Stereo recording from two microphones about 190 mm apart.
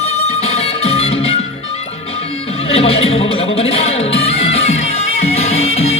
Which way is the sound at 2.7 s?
30° left (ahead or behind).